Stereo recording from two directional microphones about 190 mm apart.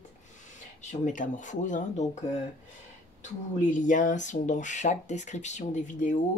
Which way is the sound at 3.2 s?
40° left (ahead or behind).